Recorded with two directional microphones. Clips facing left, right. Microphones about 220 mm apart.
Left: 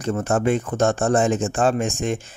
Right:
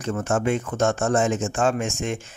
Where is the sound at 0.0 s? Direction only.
35° left (ahead or behind).